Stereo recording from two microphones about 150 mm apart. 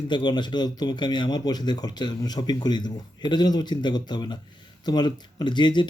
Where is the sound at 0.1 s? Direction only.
30° left (ahead or behind).